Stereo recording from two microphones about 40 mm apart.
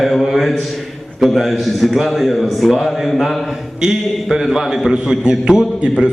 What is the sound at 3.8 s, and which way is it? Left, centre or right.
A man's voice, centre.